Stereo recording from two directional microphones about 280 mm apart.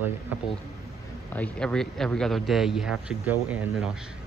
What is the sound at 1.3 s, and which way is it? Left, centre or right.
Speech, centre.